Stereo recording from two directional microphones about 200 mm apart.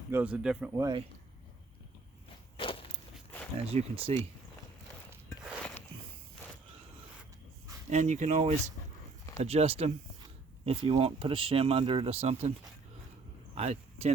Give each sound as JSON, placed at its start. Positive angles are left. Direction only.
{"t": 0.1, "sound": "speech", "side_deg": -10}
{"t": 2.6, "sound": "walk", "side_deg": 25}
{"t": 3.7, "sound": "speech", "side_deg": -30}
{"t": 7.9, "sound": "speech", "side_deg": -35}
{"t": 13.6, "sound": "speech", "side_deg": -30}